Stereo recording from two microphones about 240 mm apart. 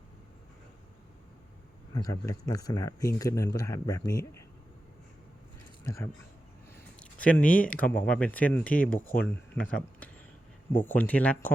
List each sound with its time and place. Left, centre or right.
1.9 s speech: centre
5.8 s speech: centre
7.0 s a sound: centre
7.4 s speech: left
7.7 s speech: centre